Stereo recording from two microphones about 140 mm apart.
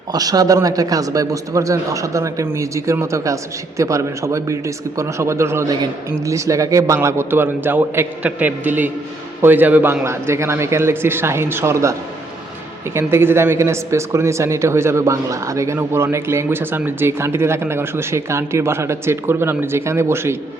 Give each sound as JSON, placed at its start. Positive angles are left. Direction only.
{"t": 0.1, "sound": "speech", "side_deg": -25}